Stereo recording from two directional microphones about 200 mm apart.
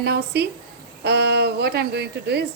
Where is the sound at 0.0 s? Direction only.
55° right (ahead or behind).